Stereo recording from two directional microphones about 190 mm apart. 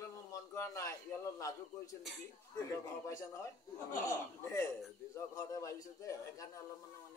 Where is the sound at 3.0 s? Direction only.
15° left (ahead or behind).